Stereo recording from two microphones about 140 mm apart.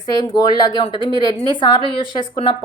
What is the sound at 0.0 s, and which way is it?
A woman's voice, 30° left (ahead or behind).